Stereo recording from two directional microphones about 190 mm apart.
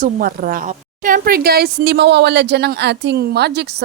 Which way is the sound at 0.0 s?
45° right (ahead or behind).